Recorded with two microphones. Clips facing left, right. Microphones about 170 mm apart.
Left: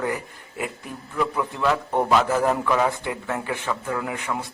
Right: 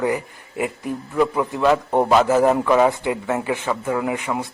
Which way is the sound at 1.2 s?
25° right (ahead or behind).